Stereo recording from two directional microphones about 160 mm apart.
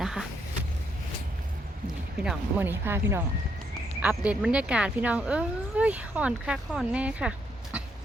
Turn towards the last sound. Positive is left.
turn(degrees=-5)  # may be behind; listen again after turning